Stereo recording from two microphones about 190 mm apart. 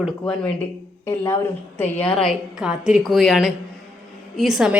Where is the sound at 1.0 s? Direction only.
15° left (ahead or behind).